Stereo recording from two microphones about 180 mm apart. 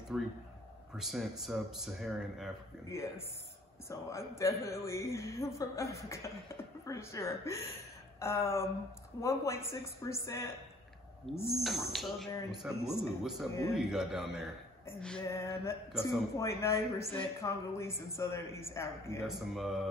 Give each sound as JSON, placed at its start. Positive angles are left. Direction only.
{"t": 0.1, "sound": "speech", "side_deg": -5}
{"t": 3.9, "sound": "a woman's voice", "side_deg": 15}
{"t": 11.6, "sound": "speech", "side_deg": 0}
{"t": 15.2, "sound": "a woman's voice", "side_deg": 15}
{"t": 19.2, "sound": "speech", "side_deg": 0}